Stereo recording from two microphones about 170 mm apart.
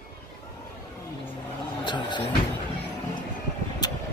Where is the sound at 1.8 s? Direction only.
25° left (ahead or behind).